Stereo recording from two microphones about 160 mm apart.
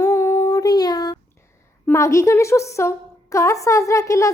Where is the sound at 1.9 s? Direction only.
20° left (ahead or behind).